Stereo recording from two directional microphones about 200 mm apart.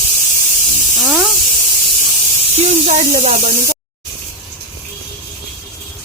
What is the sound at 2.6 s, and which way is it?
Speech, 35° right (ahead or behind).